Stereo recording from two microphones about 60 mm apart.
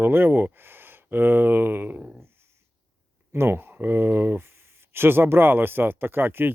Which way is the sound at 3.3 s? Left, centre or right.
Right.